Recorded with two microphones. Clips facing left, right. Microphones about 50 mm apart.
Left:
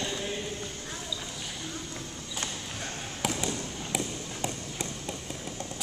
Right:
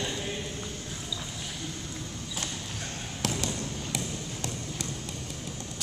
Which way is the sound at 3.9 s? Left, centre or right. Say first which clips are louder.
Left 1 dB; centre.